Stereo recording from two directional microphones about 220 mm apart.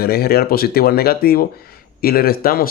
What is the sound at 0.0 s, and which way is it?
Speech, 45° left (ahead or behind).